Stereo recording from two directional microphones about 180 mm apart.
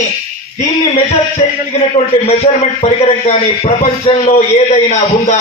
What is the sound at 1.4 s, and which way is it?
A man's voice, 35° left (ahead or behind).